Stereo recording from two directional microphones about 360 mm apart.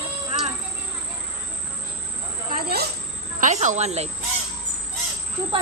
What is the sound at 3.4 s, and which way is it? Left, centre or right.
Speech, centre.